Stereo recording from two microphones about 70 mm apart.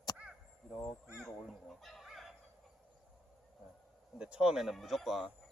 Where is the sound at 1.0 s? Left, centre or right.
Centre.